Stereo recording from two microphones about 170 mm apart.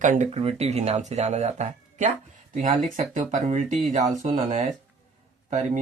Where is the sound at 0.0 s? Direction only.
45° right (ahead or behind).